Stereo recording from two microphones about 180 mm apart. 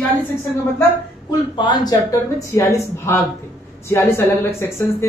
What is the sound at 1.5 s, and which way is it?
A woman's voice, 25° left (ahead or behind).